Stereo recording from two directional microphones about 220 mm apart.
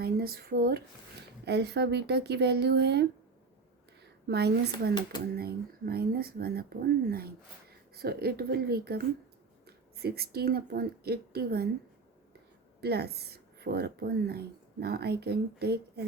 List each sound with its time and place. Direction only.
0.0 s speech: 45° right (ahead or behind)
4.3 s speech: 50° right (ahead or behind)
12.8 s speech: 45° right (ahead or behind)